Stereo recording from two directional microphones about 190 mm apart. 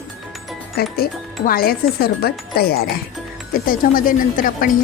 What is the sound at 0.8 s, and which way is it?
A woman's voice, 55° left (ahead or behind).